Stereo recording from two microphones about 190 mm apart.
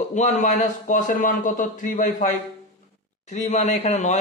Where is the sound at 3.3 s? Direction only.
40° left (ahead or behind).